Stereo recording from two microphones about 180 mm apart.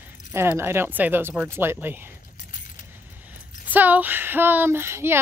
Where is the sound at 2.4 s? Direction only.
45° left (ahead or behind).